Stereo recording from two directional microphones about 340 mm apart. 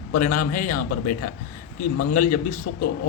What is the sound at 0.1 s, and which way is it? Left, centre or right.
Speech, left.